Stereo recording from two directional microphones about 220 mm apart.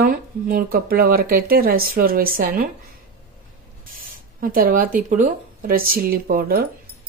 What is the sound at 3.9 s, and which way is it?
Speech, 40° right (ahead or behind).